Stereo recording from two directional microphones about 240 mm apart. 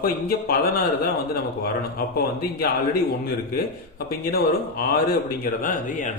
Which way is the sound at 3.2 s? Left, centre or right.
Left.